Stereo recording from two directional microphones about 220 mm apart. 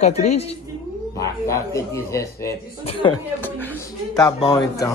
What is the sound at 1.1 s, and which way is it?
Speech, 15° left (ahead or behind).